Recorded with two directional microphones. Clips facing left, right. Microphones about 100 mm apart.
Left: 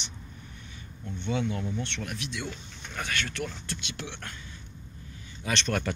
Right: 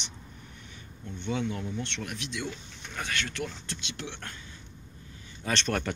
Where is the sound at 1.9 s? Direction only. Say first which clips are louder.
Left 1 dB; 25° right (ahead or behind).